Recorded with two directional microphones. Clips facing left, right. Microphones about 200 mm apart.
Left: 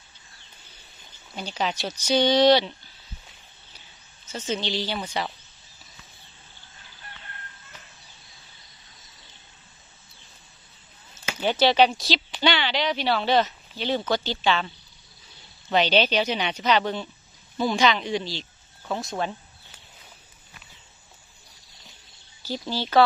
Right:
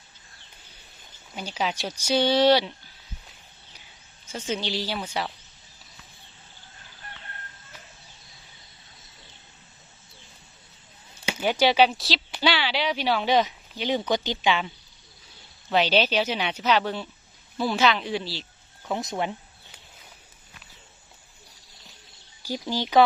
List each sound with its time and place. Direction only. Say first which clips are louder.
1.4 s speech: left 1 dB; 10° right (ahead or behind)
4.3 s speech: left 1 dB; 10° right (ahead or behind)
11.1 s speech: even; 10° right (ahead or behind)
15.7 s speech: left 1 dB; 5° right (ahead or behind)
18.9 s speech: even; 15° right (ahead or behind)
22.4 s speech: right 1 dB; 10° right (ahead or behind)